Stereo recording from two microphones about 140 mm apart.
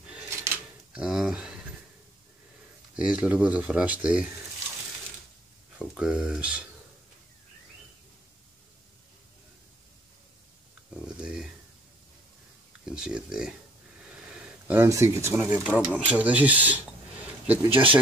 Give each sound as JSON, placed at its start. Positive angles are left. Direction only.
{"t": 0.9, "sound": "a sound", "side_deg": -5}
{"t": 3.0, "sound": "speech", "side_deg": -5}
{"t": 5.8, "sound": "speech", "side_deg": -5}
{"t": 11.1, "sound": "a sound", "side_deg": -5}
{"t": 12.8, "sound": "speech", "side_deg": -5}
{"t": 14.7, "sound": "speech", "side_deg": -20}